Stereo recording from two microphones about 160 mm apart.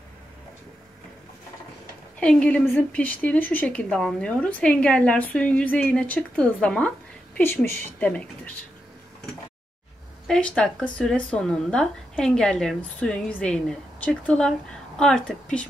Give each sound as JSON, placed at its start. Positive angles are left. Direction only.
{"t": 2.1, "sound": "a woman's voice", "side_deg": 5}
{"t": 10.2, "sound": "speech", "side_deg": 5}